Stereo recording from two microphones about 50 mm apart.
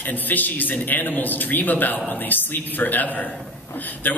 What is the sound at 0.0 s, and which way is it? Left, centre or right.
A man's voice, left.